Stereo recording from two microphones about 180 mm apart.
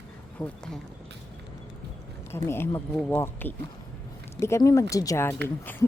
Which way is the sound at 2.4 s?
15° left (ahead or behind).